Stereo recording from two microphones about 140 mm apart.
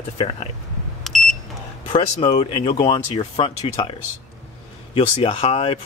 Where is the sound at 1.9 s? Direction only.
40° left (ahead or behind).